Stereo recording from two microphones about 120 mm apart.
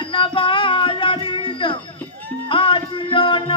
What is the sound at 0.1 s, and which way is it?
Music, 45° left (ahead or behind).